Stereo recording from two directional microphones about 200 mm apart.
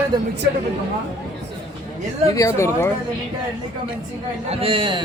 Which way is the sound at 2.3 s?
15° left (ahead or behind).